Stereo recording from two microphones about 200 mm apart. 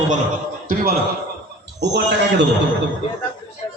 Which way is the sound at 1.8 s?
60° right (ahead or behind).